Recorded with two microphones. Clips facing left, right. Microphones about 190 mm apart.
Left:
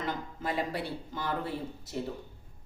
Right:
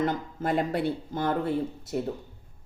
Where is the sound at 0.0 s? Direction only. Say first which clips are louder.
Right 7 dB; 55° right (ahead or behind).